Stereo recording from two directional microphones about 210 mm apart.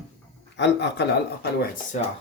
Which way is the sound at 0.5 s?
55° left (ahead or behind).